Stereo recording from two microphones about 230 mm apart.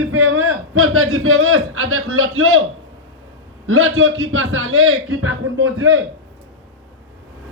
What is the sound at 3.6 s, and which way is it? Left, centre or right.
A man's voice, right.